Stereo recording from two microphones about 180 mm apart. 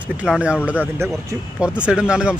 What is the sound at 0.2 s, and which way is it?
Speech, 5° right (ahead or behind).